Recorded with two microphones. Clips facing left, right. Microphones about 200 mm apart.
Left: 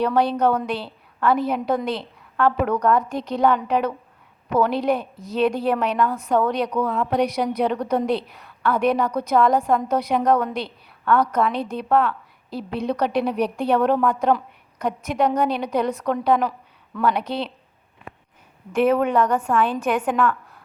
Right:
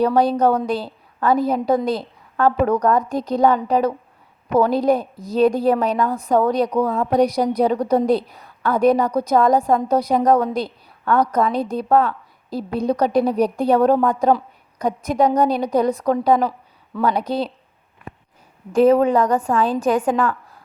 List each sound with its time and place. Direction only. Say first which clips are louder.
0.0 s a woman's voice: right 3 dB; 40° right (ahead or behind)
18.7 s a woman's voice: right 5 dB; 35° right (ahead or behind)